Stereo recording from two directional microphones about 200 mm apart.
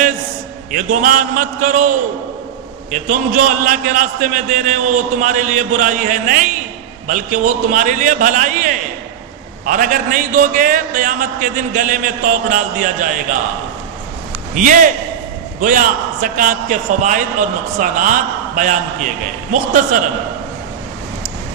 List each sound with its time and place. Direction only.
0.7 s a man's voice: 40° right (ahead or behind)
14.5 s a man's voice: 40° right (ahead or behind)